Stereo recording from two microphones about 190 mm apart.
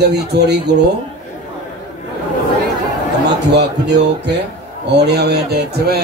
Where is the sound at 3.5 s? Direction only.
65° right (ahead or behind).